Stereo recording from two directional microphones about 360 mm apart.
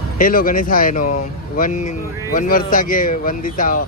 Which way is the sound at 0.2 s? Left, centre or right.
Left.